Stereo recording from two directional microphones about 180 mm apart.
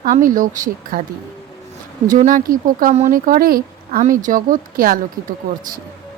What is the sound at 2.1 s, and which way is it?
Speech, 45° right (ahead or behind).